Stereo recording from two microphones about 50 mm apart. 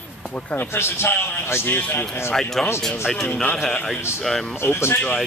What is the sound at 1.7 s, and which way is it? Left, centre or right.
Speech, left.